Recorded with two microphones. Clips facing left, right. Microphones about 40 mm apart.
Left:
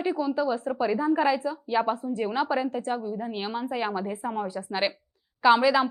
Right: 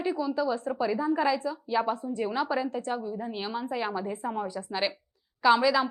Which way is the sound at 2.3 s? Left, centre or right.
Centre.